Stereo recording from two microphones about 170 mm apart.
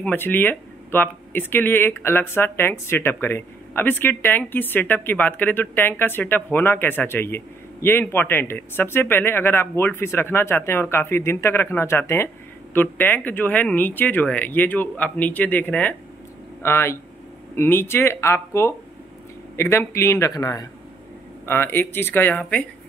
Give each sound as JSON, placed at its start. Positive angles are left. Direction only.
{"t": 0.0, "sound": "speech", "side_deg": 10}